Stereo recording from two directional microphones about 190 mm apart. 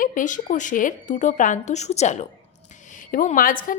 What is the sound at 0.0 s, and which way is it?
A woman's voice, 45° left (ahead or behind).